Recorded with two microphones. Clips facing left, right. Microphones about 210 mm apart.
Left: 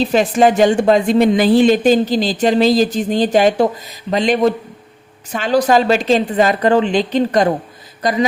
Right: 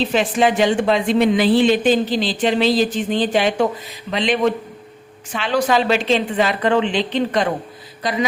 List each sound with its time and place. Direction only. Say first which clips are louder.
0.0 s speech: left 4 dB; 40° left (ahead or behind)